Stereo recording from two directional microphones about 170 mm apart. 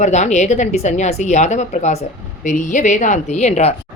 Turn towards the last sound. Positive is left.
turn(degrees=40)  # may be behind; listen again after turning